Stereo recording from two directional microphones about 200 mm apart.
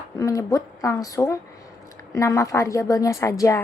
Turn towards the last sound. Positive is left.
turn(degrees=15)  # may be behind; listen again after turning